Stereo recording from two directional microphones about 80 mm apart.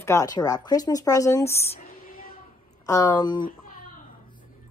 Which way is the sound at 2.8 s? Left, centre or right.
Left.